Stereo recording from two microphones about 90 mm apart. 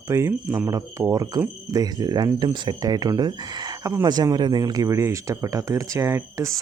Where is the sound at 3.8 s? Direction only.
35° right (ahead or behind).